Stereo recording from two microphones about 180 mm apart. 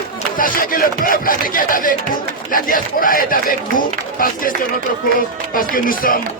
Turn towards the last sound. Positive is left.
turn(degrees=50)  # may be behind; listen again after turning